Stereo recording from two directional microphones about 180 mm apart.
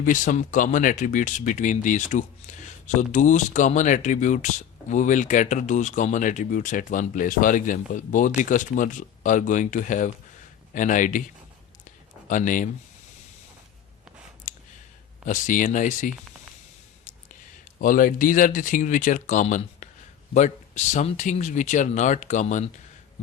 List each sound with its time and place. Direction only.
0.0 s speech: 45° left (ahead or behind)
11.9 s a sound: 45° left (ahead or behind)
14.5 s clicking: 45° left (ahead or behind)
15.3 s speech: 45° left (ahead or behind)
17.7 s speech: 50° left (ahead or behind)